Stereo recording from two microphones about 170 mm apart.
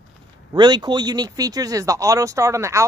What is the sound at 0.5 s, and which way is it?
Speech, 25° right (ahead or behind).